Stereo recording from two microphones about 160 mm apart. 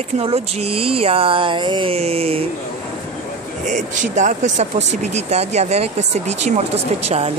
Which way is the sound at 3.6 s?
50° right (ahead or behind).